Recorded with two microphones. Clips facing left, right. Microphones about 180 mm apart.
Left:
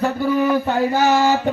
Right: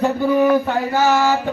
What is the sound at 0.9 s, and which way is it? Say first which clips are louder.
Speech: right 1 dB; 15° left (ahead or behind).